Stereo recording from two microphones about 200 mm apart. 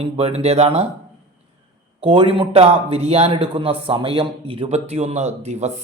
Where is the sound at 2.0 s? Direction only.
25° right (ahead or behind).